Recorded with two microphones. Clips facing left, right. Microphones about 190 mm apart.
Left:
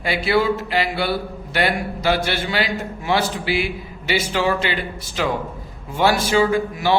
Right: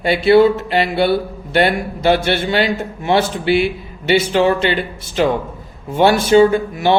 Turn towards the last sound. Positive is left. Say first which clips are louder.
# right 5 dB
turn(degrees=-25)  # may be behind; listen again after turning